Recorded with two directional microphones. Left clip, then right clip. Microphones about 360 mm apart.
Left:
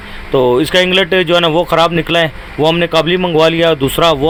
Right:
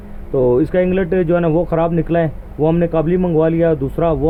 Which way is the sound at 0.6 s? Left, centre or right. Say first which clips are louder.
Left 5 dB; centre.